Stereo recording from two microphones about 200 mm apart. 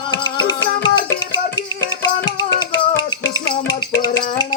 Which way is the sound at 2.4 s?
20° left (ahead or behind).